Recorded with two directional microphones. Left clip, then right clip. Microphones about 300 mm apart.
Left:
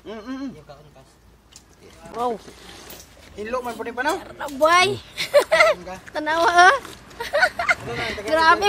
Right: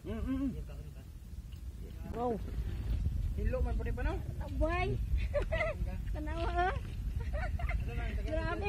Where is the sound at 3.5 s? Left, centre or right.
Left.